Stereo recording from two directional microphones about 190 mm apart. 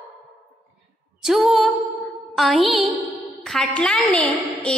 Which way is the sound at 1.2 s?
Centre (ahead or behind).